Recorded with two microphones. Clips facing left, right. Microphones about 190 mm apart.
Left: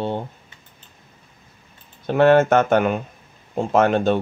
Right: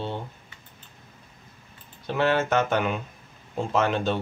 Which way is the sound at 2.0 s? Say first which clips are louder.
Left 9 dB; 50° left (ahead or behind).